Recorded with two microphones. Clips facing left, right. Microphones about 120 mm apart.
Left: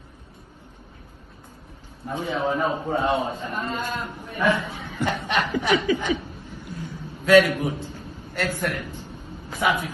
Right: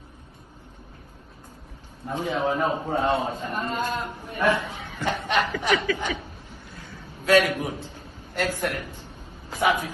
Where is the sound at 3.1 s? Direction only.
15° left (ahead or behind).